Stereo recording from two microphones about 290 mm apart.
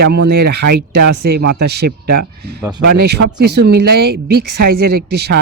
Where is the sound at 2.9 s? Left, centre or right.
Right.